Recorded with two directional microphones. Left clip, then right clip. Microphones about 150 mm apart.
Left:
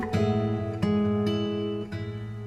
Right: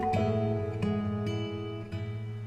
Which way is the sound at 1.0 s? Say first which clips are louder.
Left 8 dB; 25° right (ahead or behind).